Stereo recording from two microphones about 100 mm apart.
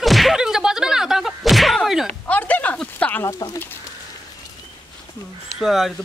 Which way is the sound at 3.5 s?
20° left (ahead or behind).